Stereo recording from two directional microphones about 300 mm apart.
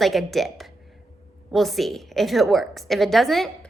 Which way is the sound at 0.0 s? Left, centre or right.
Centre.